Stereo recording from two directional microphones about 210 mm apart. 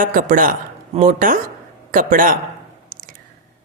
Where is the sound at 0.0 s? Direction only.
40° right (ahead or behind).